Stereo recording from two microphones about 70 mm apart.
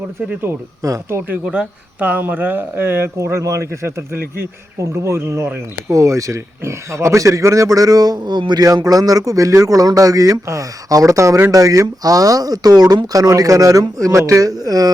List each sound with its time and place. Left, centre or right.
0.8 s speech: right
1.5 s a man's voice: centre; by 14.8 s right